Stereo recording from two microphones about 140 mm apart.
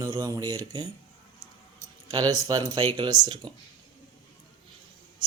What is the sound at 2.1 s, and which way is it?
Speech, 25° right (ahead or behind).